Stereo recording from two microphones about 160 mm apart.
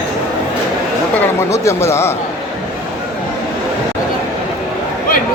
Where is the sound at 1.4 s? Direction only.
20° left (ahead or behind).